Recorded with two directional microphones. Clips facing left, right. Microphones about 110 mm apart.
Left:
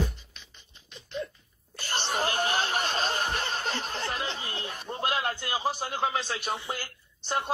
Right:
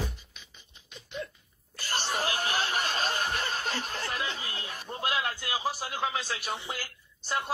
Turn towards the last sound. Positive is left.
turn(degrees=30)  # may be behind; listen again after turning